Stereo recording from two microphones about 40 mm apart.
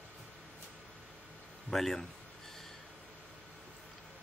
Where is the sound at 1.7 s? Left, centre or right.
Centre.